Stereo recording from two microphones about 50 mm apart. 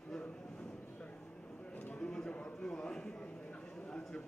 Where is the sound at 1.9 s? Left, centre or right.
Centre.